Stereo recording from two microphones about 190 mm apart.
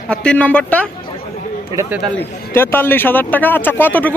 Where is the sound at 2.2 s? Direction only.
10° left (ahead or behind).